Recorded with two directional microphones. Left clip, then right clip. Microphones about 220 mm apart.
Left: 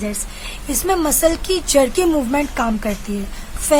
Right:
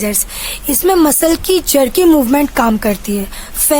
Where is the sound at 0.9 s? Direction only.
45° right (ahead or behind).